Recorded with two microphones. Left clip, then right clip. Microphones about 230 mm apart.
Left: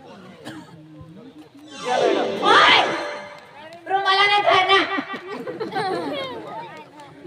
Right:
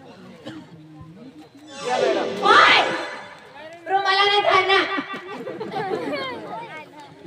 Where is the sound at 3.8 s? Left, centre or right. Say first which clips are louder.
Left 1 dB; centre.